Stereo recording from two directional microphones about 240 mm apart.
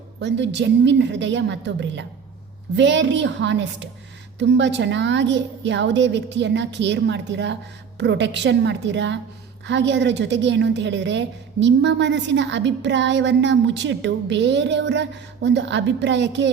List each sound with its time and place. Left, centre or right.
0.2 s a woman's voice: right